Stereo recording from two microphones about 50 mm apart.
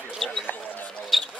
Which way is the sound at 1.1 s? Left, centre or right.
Centre.